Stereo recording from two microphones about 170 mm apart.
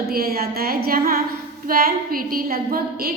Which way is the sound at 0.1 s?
60° right (ahead or behind).